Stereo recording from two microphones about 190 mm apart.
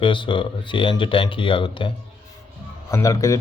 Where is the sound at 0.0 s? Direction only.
25° left (ahead or behind).